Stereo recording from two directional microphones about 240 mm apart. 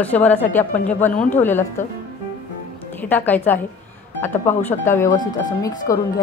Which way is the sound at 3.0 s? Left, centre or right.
Centre.